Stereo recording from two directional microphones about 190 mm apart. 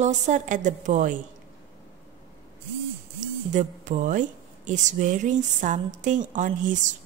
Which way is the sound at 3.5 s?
40° right (ahead or behind).